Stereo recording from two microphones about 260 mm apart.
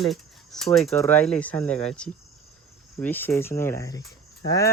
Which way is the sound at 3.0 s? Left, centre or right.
Centre.